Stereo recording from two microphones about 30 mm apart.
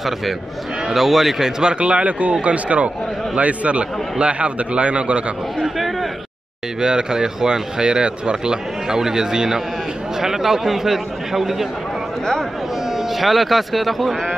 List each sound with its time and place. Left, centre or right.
0.8 s a man's voice: centre
1.6 s a man's voice: right
6.8 s a man's voice: right; by 11.6 s centre
12.9 s speech: centre